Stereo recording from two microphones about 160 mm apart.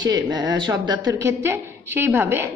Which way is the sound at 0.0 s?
25° right (ahead or behind).